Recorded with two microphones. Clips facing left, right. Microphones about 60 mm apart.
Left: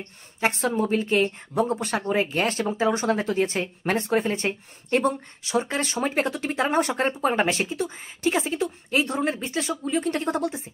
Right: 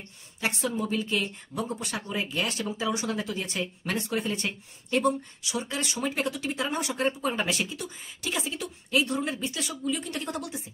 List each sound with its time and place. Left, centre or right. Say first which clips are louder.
0.0 s speech: left 6 dB; left